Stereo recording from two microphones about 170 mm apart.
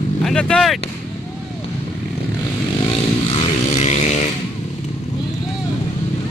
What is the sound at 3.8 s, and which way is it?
Vehicle, 40° left (ahead or behind).